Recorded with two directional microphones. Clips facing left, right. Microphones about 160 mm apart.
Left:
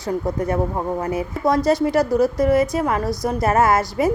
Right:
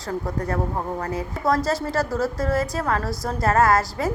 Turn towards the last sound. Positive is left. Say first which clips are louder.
# left 2 dB
turn(degrees=20)  # may be behind; listen again after turning